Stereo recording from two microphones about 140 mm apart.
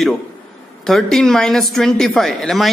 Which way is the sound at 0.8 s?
5° left (ahead or behind).